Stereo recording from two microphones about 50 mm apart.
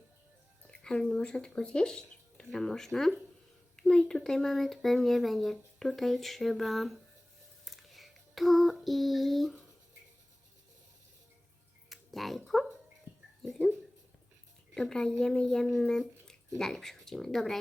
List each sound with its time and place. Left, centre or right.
0.7 s speech: centre
7.6 s a sound: centre
11.9 s tick: centre
14.8 s speech: centre